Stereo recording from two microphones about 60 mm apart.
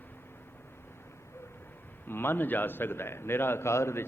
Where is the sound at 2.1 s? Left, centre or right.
Left.